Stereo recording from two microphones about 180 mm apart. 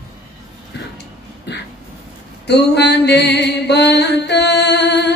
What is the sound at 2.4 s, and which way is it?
Mantra, 70° left (ahead or behind).